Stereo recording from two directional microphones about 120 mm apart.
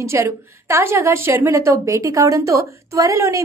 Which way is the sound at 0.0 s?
20° right (ahead or behind).